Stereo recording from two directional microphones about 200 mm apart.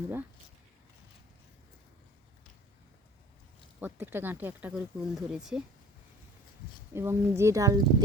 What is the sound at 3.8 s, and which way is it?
Speech, 10° right (ahead or behind).